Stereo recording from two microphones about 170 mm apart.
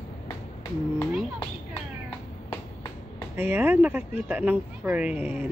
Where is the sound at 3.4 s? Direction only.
10° right (ahead or behind).